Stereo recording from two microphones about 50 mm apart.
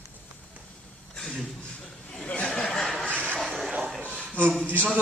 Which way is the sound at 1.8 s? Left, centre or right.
Centre.